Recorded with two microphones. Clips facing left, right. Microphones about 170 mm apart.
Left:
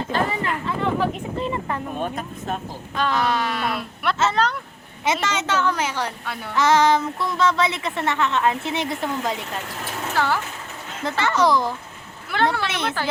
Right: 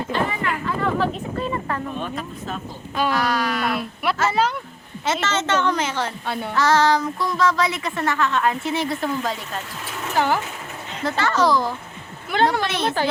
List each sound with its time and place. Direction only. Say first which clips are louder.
0.1 s chatter: left 1 dB; 30° left (ahead or behind)
0.9 s a sound: right 1 dB; 15° left (ahead or behind)
2.0 s speech: left 1 dB; 50° left (ahead or behind)
2.9 s speech: right 1 dB; 10° right (ahead or behind)
3.2 s child singing: even; 25° left (ahead or behind)
3.6 s speech: right 2 dB; centre (ahead or behind)
5.2 s a woman's voice: right 4 dB; 10° left (ahead or behind)
6.2 s speech: right 5 dB; 30° right (ahead or behind)
6.6 s child singing: left 1 dB; 20° left (ahead or behind)
10.2 s speech: right 2 dB; 15° right (ahead or behind)
11.2 s child singing: even; 20° left (ahead or behind)
12.3 s speech: right 2 dB; 15° right (ahead or behind)